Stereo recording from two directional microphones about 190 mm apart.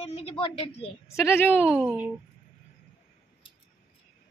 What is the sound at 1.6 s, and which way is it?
Speech, 5° right (ahead or behind).